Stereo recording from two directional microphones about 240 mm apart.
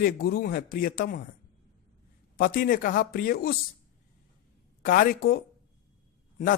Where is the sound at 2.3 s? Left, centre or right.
Left.